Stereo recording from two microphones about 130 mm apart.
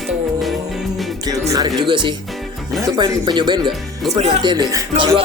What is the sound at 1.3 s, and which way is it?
Speech, 30° right (ahead or behind).